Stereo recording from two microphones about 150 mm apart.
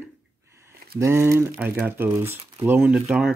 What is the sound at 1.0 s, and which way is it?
Speech, 20° right (ahead or behind).